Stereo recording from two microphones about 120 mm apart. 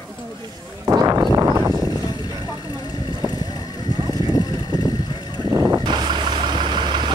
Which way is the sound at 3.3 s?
35° left (ahead or behind).